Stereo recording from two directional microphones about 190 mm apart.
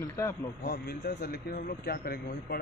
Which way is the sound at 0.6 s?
55° left (ahead or behind).